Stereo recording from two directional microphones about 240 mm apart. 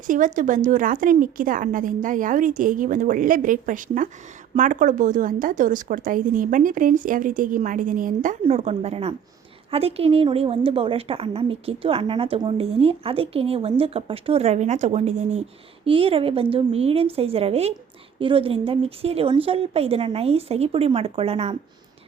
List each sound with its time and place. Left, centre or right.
0.1 s a woman's voice: right